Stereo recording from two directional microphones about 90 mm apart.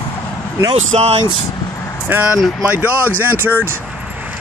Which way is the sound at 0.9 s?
90° right.